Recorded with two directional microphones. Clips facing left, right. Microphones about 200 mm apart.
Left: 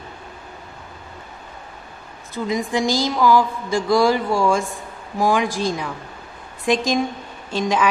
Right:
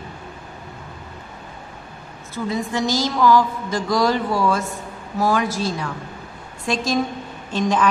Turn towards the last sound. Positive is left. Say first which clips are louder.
# right 1 dB
turn(degrees=10)  # may be behind; listen again after turning